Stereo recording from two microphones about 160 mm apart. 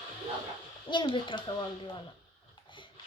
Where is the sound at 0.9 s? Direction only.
30° left (ahead or behind).